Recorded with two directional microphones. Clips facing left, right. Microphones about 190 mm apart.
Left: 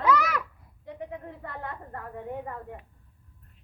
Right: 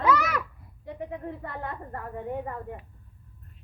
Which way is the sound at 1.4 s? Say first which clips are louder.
Right 2 dB; 10° right (ahead or behind).